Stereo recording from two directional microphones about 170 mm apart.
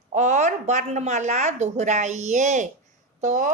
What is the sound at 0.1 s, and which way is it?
Speech, 45° right (ahead or behind).